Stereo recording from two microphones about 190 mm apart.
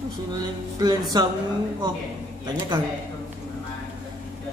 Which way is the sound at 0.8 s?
20° right (ahead or behind).